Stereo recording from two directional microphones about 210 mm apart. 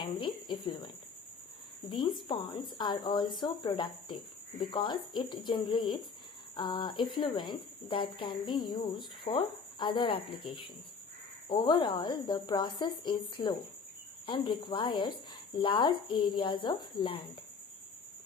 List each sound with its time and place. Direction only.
0.0 s speech: 20° left (ahead or behind)
1.9 s speech: 20° left (ahead or behind)